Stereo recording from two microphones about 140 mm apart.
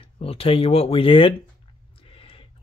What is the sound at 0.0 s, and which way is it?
Speech, 40° left (ahead or behind).